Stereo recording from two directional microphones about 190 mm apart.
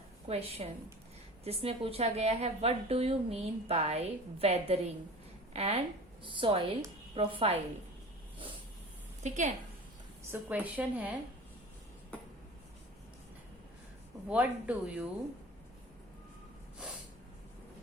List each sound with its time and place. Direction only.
0.3 s a woman's voice: 30° right (ahead or behind)
9.2 s a woman's voice: 40° right (ahead or behind)
10.3 s a woman's voice: 10° right (ahead or behind)
14.3 s a woman's voice: 5° right (ahead or behind)